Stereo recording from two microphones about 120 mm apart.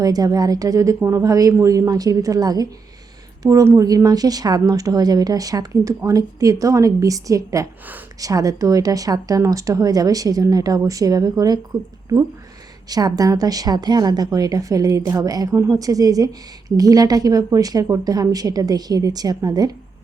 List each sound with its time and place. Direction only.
0.0 s a woman's voice: 30° right (ahead or behind)
12.9 s a woman's voice: 30° right (ahead or behind)